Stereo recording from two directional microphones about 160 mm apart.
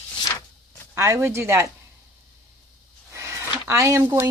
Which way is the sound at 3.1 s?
15° right (ahead or behind).